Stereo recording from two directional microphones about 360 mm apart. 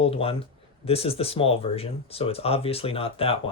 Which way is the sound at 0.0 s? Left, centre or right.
Centre.